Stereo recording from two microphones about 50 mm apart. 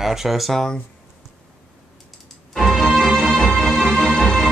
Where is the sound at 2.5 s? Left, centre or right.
Centre.